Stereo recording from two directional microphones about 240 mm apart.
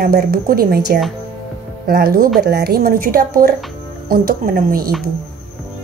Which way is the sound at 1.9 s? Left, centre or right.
Right.